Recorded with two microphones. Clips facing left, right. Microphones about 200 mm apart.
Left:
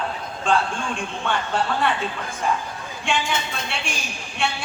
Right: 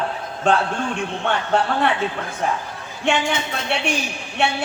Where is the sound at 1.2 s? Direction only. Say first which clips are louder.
Right 4 dB; 60° right (ahead or behind).